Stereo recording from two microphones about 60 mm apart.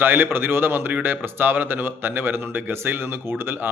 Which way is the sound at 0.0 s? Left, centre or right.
Right.